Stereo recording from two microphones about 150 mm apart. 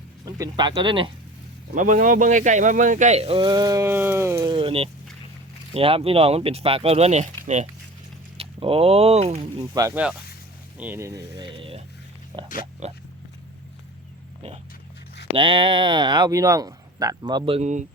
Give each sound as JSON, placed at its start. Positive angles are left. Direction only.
{"t": 0.3, "sound": "speech", "side_deg": -25}
{"t": 1.7, "sound": "speech", "side_deg": -60}
{"t": 4.5, "sound": "speech", "side_deg": -40}
{"t": 8.4, "sound": "speech", "side_deg": -40}
{"t": 9.6, "sound": "speech", "side_deg": -25}
{"t": 9.9, "sound": "speech", "side_deg": -10}
{"t": 12.8, "sound": "speech", "side_deg": -50}
{"t": 15.4, "sound": "speech", "side_deg": -35}
{"t": 17.6, "sound": "speech", "side_deg": -55}